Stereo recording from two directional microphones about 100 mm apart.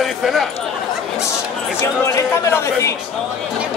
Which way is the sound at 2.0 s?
25° left (ahead or behind).